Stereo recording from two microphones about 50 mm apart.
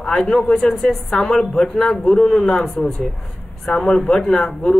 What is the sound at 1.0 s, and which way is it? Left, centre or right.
Speech, centre.